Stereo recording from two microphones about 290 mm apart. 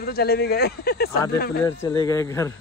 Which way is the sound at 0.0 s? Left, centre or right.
Left.